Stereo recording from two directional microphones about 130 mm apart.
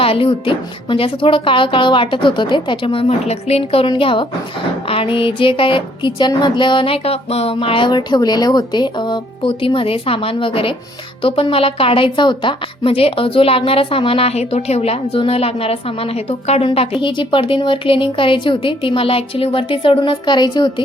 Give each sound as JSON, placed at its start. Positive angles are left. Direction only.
{"t": 0.0, "sound": "a woman's voice", "side_deg": 45}